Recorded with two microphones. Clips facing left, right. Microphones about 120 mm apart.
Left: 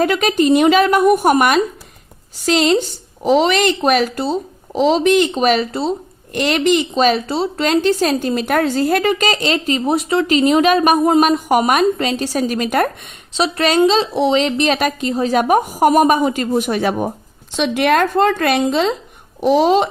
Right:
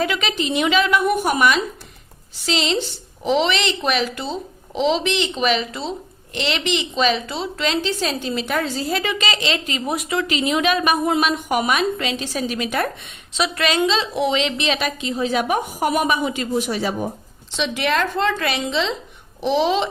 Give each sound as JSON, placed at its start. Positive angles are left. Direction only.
{"t": 0.0, "sound": "a woman's voice", "side_deg": 45}
{"t": 13.3, "sound": "a woman's voice", "side_deg": 35}